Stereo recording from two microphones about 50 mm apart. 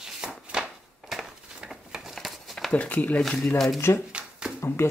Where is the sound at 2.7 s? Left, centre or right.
Left.